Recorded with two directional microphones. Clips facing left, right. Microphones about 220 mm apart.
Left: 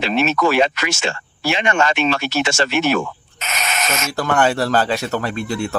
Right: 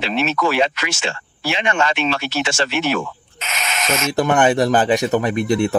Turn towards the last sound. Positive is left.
turn(degrees=-20)  # may be behind; listen again after turning